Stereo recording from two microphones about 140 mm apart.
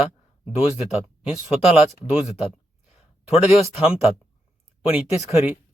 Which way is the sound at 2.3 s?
50° left (ahead or behind).